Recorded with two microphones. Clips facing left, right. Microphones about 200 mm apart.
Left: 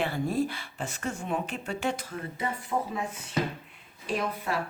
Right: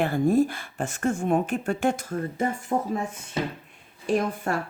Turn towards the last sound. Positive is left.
turn(degrees=-50)  # may be behind; listen again after turning